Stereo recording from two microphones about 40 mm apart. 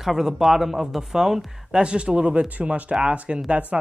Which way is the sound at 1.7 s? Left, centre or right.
Right.